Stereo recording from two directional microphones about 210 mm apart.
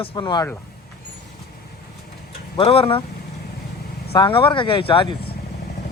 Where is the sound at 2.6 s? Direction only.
25° left (ahead or behind).